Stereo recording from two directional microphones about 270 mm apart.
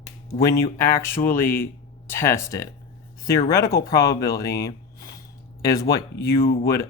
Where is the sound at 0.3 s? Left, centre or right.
Centre.